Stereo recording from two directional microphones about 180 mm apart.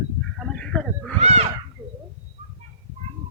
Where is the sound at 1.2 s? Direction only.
35° right (ahead or behind).